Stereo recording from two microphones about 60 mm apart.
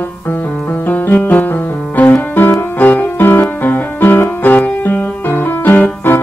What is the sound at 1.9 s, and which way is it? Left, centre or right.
Music, left.